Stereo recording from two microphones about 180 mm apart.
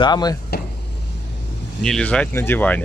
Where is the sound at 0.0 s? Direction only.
20° left (ahead or behind).